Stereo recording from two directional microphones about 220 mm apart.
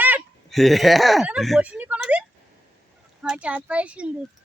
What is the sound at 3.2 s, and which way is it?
Speech, 5° right (ahead or behind).